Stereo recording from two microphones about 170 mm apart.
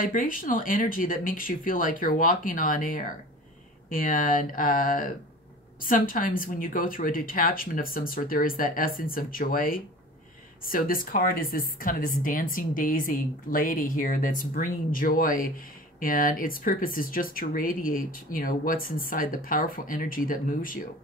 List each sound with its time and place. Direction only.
0.0 s speech: 55° left (ahead or behind)